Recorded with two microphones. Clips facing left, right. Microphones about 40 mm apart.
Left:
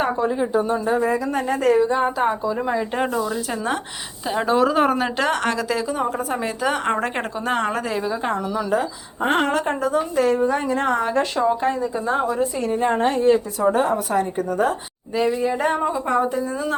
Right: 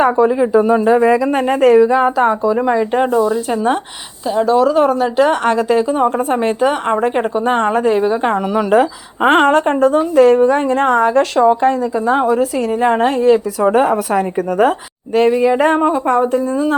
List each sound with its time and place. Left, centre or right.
0.0 s speech: right
1.3 s speech: right
2.6 s speech: right
3.1 s speech: right
4.3 s a woman's voice: centre
5.3 s speech: centre
5.5 s speech: right
6.6 s speech: centre
7.4 s a woman's voice: right
8.2 s a woman's voice: right
9.4 s a woman's voice: right
11.3 s a woman's voice: right
15.1 s a woman's voice: right